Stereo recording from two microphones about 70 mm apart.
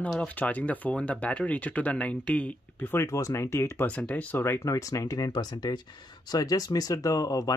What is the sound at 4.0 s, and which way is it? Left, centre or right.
Speech, centre.